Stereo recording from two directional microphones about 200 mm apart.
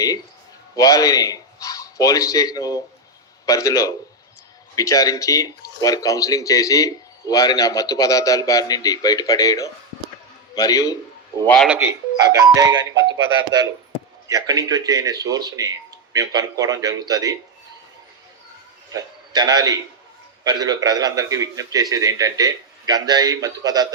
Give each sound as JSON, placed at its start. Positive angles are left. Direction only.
{"t": 0.8, "sound": "speech", "side_deg": 15}
{"t": 11.4, "sound": "speech", "side_deg": 5}
{"t": 11.7, "sound": "speech", "side_deg": -10}
{"t": 12.9, "sound": "speech", "side_deg": -65}
{"t": 14.3, "sound": "a man's voice", "side_deg": -20}
{"t": 18.9, "sound": "a man's voice", "side_deg": -20}